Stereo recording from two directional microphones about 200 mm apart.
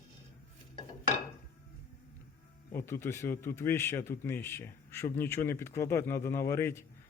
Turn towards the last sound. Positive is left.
turn(degrees=10)  # may be behind; listen again after turning